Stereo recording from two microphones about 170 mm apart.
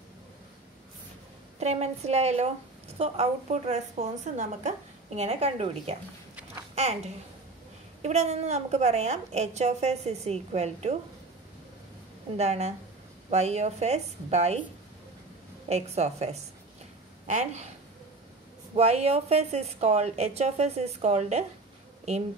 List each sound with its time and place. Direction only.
1.6 s a woman's voice: 40° right (ahead or behind)
6.7 s a sound: 40° right (ahead or behind)
8.0 s a woman's voice: 40° right (ahead or behind)
12.4 s a woman's voice: 40° right (ahead or behind)
15.7 s a woman's voice: 40° right (ahead or behind)
18.8 s a woman's voice: 40° right (ahead or behind)